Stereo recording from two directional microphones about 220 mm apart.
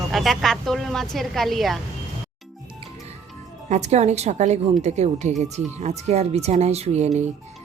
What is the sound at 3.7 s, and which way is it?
Speech, 30° right (ahead or behind).